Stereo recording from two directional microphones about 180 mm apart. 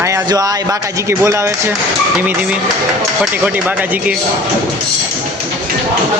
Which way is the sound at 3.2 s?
10° right (ahead or behind).